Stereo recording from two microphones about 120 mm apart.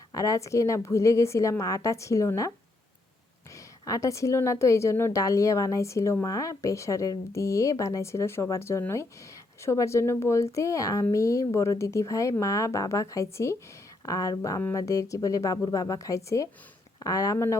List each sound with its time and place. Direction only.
0.1 s a woman's voice: 30° left (ahead or behind)
3.5 s a woman's voice: 30° left (ahead or behind)